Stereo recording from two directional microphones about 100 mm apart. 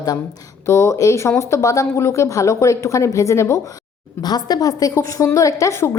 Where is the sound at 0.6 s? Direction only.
25° left (ahead or behind).